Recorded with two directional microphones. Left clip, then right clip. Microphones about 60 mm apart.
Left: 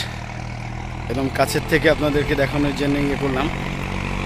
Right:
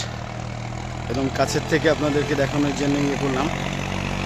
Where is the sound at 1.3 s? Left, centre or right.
Centre.